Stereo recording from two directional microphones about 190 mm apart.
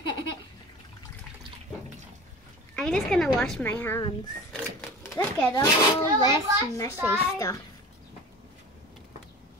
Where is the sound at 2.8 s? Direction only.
5° left (ahead or behind).